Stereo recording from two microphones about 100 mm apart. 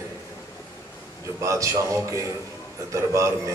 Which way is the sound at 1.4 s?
30° right (ahead or behind).